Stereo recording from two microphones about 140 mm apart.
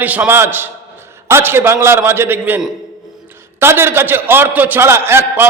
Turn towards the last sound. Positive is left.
turn(degrees=-15)  # may be behind; listen again after turning